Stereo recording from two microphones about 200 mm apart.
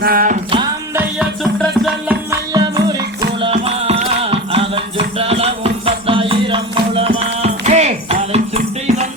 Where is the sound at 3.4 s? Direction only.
30° right (ahead or behind).